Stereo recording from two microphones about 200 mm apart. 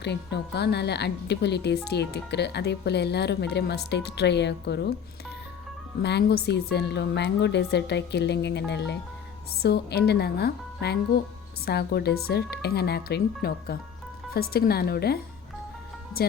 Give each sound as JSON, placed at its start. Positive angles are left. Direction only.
{"t": 0.0, "sound": "a woman's voice", "side_deg": 55}
{"t": 6.0, "sound": "a woman's voice", "side_deg": 55}